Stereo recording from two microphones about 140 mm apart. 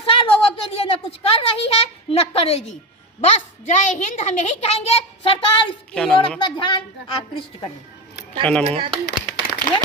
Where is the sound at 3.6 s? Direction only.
60° left (ahead or behind); by 6.8 s 35° left (ahead or behind).